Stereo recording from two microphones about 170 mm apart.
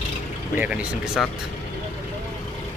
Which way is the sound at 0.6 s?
5° right (ahead or behind).